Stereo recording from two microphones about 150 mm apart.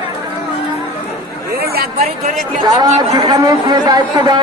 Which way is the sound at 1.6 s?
90° right.